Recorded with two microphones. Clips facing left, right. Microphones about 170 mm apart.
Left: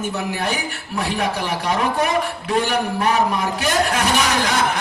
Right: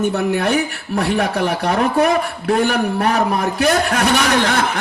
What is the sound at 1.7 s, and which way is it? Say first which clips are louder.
A man's voice: right 4 dB; 50° right (ahead or behind).